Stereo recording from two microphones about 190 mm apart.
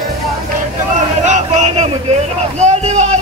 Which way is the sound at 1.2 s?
35° right (ahead or behind).